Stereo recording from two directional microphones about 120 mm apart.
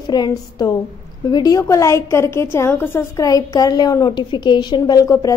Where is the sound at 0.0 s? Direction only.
35° left (ahead or behind).